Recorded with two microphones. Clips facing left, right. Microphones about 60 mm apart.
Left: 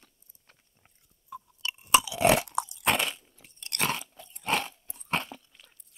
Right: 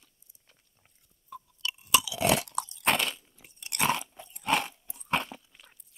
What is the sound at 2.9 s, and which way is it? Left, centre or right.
Crunch, centre.